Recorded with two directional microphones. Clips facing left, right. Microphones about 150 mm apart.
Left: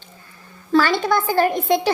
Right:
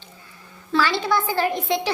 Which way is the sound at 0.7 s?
50° left (ahead or behind).